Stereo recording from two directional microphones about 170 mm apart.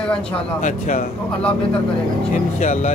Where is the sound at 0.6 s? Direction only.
50° left (ahead or behind).